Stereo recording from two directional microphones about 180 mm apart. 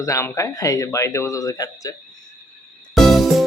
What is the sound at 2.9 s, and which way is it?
Music, centre (ahead or behind).